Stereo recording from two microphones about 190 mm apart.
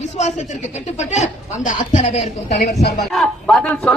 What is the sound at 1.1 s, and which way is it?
A woman's voice, 35° left (ahead or behind).